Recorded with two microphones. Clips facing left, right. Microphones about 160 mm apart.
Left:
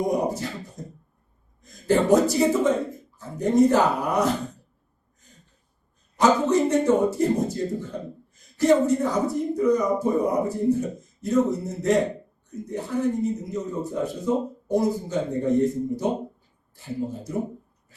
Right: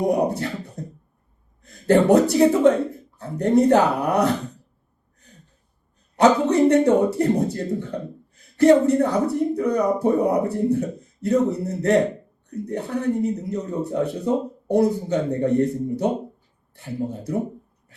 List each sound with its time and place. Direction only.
0.0 s a sound: 65° right (ahead or behind)
1.6 s a man's voice: 65° right (ahead or behind)
6.1 s speech: 65° right (ahead or behind)